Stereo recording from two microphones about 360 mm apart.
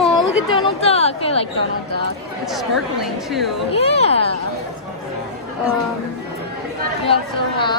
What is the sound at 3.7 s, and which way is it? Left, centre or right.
Speech, centre.